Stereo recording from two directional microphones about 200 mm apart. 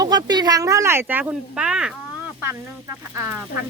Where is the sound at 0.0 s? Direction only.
20° right (ahead or behind); by 1.9 s 5° right (ahead or behind).